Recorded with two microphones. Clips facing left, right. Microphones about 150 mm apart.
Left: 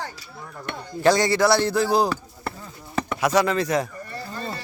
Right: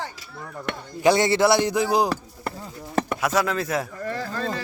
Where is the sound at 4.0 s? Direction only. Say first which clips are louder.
Right 6 dB; 90° right.